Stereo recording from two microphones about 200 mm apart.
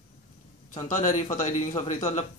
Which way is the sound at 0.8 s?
35° left (ahead or behind).